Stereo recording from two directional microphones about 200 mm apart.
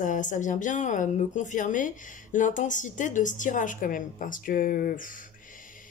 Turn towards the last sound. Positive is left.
turn(degrees=40)  # may be behind; listen again after turning